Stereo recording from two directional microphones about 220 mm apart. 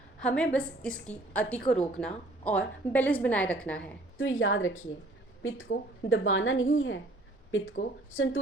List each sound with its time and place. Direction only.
0.2 s a woman's voice: 5° left (ahead or behind)
4.2 s a woman's voice: 60° left (ahead or behind)
8.1 s a woman's voice: 65° left (ahead or behind)